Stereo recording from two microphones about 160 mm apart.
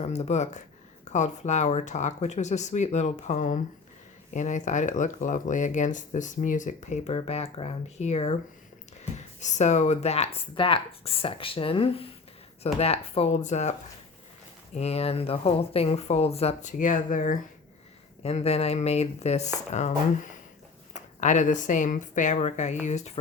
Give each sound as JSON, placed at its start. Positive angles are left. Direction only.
{"t": 0.0, "sound": "speech", "side_deg": 40}
{"t": 14.8, "sound": "speech", "side_deg": 40}
{"t": 16.7, "sound": "speech", "side_deg": 55}
{"t": 18.2, "sound": "speech", "side_deg": 40}